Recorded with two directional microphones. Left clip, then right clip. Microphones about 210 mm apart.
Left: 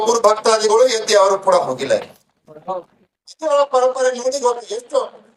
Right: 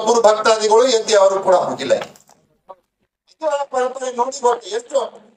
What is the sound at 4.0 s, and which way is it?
Speech, 30° left (ahead or behind).